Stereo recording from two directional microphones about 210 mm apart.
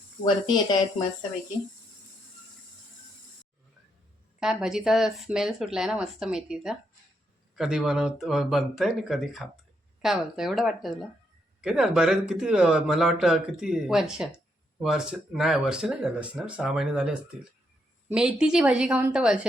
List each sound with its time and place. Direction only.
0.3 s speech: 20° left (ahead or behind)
4.4 s speech: centre (ahead or behind)